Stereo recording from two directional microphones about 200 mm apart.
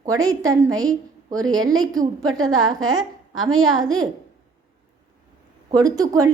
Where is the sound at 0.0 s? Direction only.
15° right (ahead or behind).